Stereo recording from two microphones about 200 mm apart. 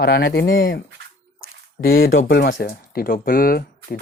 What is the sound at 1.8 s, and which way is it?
Speech, 45° left (ahead or behind).